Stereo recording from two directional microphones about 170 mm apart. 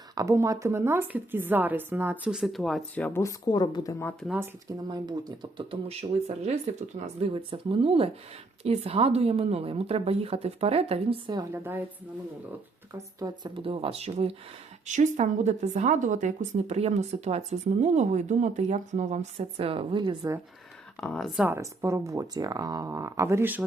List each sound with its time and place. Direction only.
0.2 s a woman's voice: 20° right (ahead or behind); by 4.1 s 20° left (ahead or behind)
4.9 s a woman's voice: 25° right (ahead or behind)
13.0 s speech: 20° right (ahead or behind)
13.6 s a woman's voice: 30° right (ahead or behind)
21.0 s speech: centre (ahead or behind)
21.4 s a woman's voice: 15° right (ahead or behind)